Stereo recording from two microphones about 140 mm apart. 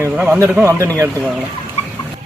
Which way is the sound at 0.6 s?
20° right (ahead or behind).